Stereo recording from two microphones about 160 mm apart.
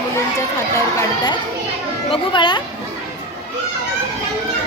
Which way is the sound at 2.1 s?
30° left (ahead or behind).